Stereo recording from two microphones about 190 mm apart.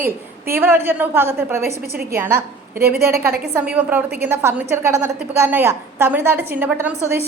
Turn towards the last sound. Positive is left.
turn(degrees=-10)  # may be behind; listen again after turning